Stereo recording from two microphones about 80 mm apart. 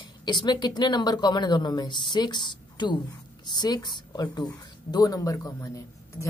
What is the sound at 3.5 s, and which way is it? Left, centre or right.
A woman's voice, left.